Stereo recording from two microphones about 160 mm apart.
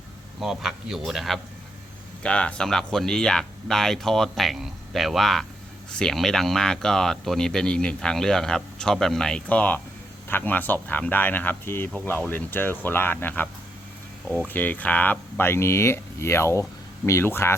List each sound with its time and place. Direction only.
0.3 s speech: centre (ahead or behind); by 17.5 s 15° left (ahead or behind)